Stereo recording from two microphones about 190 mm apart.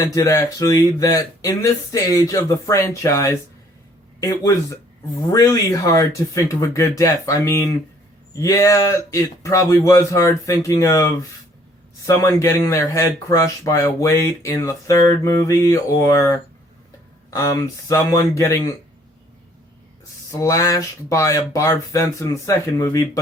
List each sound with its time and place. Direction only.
0.0 s speech: 15° left (ahead or behind)
20.3 s speech: 15° left (ahead or behind)